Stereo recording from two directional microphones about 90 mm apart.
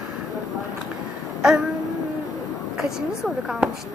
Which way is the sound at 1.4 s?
10° right (ahead or behind).